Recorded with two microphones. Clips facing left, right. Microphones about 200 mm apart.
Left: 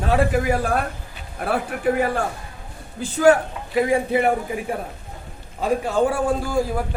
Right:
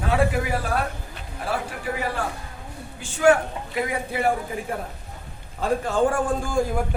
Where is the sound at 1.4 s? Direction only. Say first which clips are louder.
Left 7 dB; 50° left (ahead or behind).